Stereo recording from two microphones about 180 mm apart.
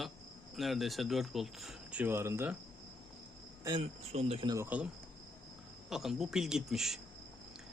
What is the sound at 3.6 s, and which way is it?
Cricket, 25° right (ahead or behind).